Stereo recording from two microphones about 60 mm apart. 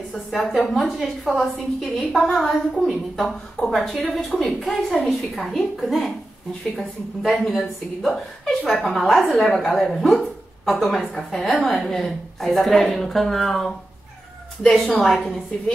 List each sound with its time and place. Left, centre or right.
0.3 s a woman's voice: centre
14.6 s a woman's voice: centre
15.0 s a woman's voice: centre